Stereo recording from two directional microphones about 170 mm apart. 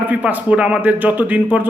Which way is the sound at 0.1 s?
10° right (ahead or behind).